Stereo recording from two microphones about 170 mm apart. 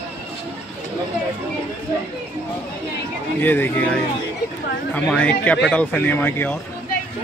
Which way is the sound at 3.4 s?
10° left (ahead or behind).